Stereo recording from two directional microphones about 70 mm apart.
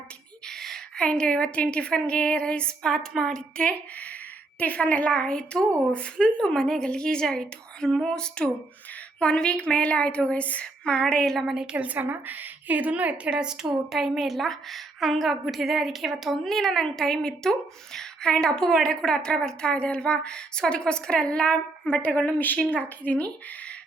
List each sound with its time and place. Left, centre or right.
0.4 s a woman's voice: centre
3.6 s a woman's voice: centre
11.5 s a woman's voice: centre; by 23.3 s left